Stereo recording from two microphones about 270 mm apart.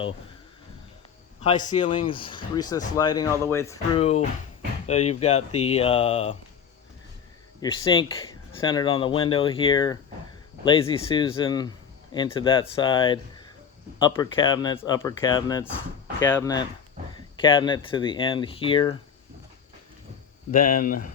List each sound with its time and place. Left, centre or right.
1.4 s a man's voice: left
3.9 s speech: left
7.6 s speech: centre
20.5 s speech: left